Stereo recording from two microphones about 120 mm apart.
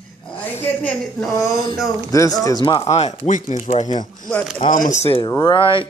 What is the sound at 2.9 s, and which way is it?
Speech, 75° left (ahead or behind).